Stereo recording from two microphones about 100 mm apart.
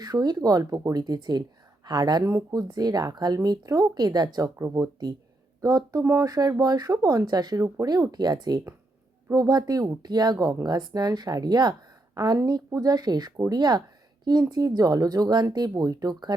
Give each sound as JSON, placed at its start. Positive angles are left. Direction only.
{"t": 0.0, "sound": "a woman's voice", "side_deg": -40}
{"t": 4.5, "sound": "speech", "side_deg": -30}